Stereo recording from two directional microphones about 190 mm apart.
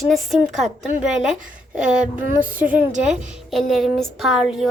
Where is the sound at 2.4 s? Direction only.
45° right (ahead or behind).